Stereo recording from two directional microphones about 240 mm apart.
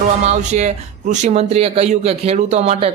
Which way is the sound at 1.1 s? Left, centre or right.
Right.